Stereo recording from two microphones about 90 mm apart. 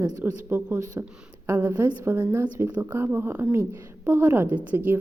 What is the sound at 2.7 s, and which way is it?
A woman's voice, 20° right (ahead or behind).